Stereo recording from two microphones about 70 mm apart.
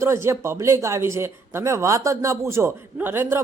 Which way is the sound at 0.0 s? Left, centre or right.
Right.